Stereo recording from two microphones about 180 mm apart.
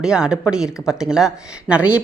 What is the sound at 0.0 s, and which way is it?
Speech, 5° right (ahead or behind).